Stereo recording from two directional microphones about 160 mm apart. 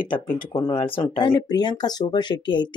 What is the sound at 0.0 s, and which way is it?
Speech, 30° left (ahead or behind).